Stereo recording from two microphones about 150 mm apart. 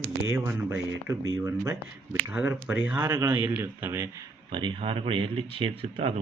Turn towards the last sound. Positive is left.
turn(degrees=-40)  # may be behind; listen again after turning